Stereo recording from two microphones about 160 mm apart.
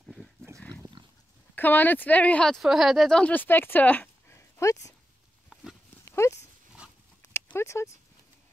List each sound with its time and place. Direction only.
0.0 s dog: centre (ahead or behind)
1.0 s pig: 30° right (ahead or behind)
1.5 s speech: 10° left (ahead or behind)
5.5 s a sound: centre (ahead or behind)
6.0 s dog: 15° left (ahead or behind)
7.5 s speech: 20° left (ahead or behind)